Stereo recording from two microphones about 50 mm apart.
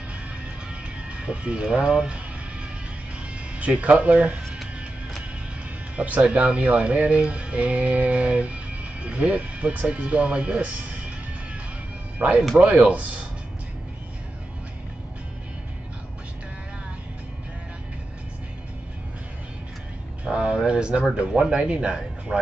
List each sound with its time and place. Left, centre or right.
0.7 s music: right
3.5 s speech: right
5.9 s speech: right
10.6 s music: right
12.2 s speech: right
20.2 s vehicle: centre
21.1 s speech: centre